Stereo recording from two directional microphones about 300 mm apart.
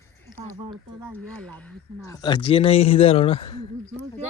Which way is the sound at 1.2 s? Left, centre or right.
Centre.